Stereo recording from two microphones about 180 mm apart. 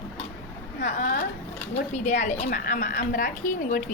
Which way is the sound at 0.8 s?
45° left (ahead or behind).